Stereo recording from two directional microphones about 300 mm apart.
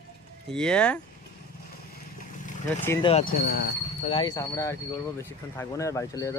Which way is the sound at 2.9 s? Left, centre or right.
Centre.